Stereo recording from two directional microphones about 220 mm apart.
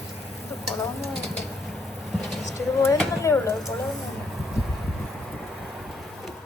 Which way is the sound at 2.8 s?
10° left (ahead or behind).